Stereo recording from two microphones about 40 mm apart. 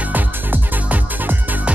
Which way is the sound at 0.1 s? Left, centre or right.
Right.